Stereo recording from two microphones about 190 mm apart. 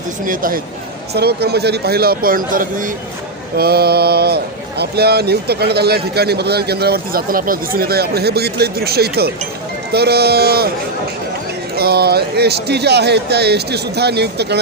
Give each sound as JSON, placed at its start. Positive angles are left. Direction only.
{"t": 0.3, "sound": "speech", "side_deg": -45}
{"t": 1.1, "sound": "speech", "side_deg": -55}
{"t": 11.7, "sound": "speech", "side_deg": -55}